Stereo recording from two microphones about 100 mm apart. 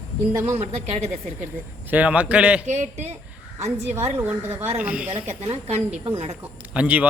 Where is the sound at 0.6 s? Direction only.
90° right.